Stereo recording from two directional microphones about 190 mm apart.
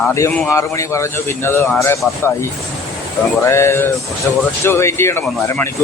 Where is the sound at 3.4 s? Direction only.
15° left (ahead or behind).